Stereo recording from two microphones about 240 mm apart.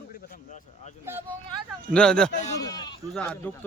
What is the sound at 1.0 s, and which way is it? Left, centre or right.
Vehicle, centre.